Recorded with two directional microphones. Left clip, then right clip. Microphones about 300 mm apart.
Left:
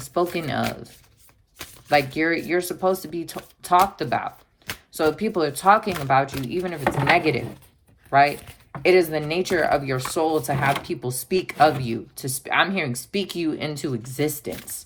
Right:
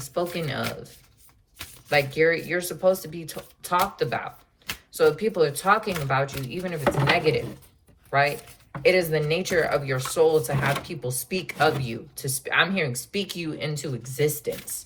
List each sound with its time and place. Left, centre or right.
0.0 s speech: centre